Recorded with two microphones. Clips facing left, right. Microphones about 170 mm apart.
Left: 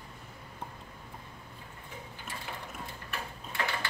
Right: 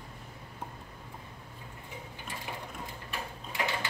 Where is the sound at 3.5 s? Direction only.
15° right (ahead or behind).